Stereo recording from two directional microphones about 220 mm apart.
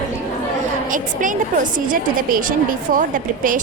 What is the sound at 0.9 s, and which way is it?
A woman's voice, 35° right (ahead or behind).